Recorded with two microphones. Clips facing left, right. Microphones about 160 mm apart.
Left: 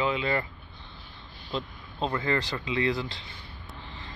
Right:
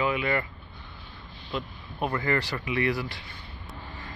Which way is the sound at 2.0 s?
20° left (ahead or behind).